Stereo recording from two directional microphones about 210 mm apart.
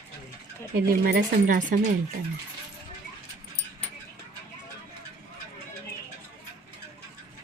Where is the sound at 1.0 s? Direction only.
45° right (ahead or behind).